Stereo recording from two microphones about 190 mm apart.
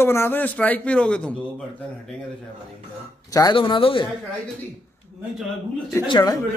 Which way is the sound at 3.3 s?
20° left (ahead or behind).